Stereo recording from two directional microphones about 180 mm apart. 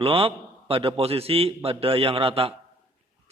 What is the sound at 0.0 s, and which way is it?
A man's voice, 30° right (ahead or behind).